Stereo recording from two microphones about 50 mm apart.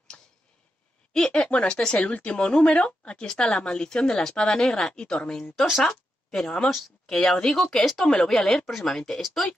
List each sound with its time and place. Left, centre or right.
0.1 s tick-tock: left
1.1 s speech: centre